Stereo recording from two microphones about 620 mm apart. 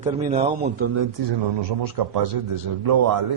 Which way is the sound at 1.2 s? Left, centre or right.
Right.